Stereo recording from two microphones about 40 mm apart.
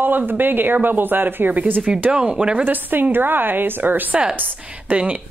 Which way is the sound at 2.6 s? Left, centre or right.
Right.